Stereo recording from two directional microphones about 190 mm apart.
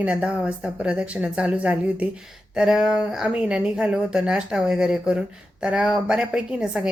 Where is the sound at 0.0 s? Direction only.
5° right (ahead or behind).